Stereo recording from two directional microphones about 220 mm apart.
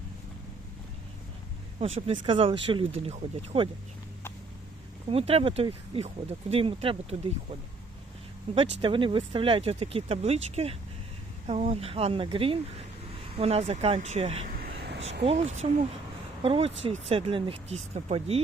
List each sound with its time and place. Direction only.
2.0 s speech: 25° right (ahead or behind)
5.0 s speech: 25° right (ahead or behind)
8.5 s speech: 25° right (ahead or behind)
14.6 s a sound: 50° right (ahead or behind)
15.4 s speech: 30° right (ahead or behind)